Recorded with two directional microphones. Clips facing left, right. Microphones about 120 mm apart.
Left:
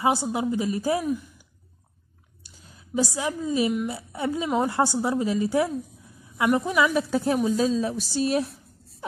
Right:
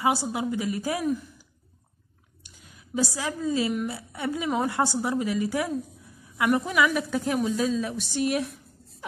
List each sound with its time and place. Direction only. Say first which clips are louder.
0.0 s a woman's voice: left 2 dB; 25° left (ahead or behind)
2.4 s a sound: left 1 dB; 30° left (ahead or behind)
3.2 s a woman's voice: left 2 dB; 20° left (ahead or behind)